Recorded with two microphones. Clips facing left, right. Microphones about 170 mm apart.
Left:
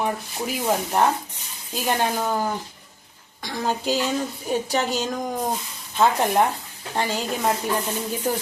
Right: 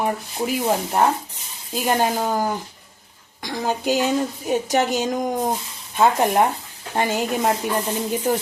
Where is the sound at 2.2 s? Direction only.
15° right (ahead or behind).